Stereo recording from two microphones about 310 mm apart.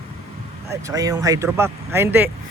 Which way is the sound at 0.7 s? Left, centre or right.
Centre.